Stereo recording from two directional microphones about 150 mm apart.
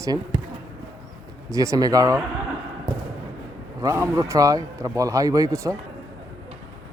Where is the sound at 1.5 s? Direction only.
20° right (ahead or behind).